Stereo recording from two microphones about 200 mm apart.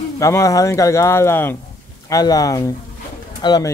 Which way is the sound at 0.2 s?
15° left (ahead or behind).